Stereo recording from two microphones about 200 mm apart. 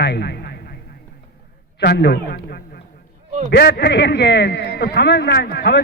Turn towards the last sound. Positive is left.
turn(degrees=55)  # may be behind; listen again after turning